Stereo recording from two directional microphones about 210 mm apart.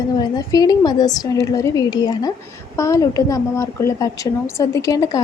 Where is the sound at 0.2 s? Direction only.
20° left (ahead or behind).